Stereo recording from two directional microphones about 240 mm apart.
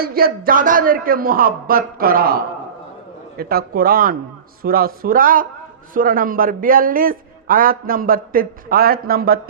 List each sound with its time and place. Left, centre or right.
0.0 s a man's voice: right